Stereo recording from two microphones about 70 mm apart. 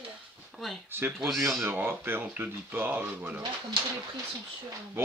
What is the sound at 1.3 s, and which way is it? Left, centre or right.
Speech, centre.